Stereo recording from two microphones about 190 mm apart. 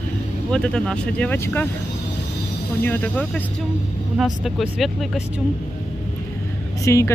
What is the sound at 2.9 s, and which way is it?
Speech, 10° left (ahead or behind).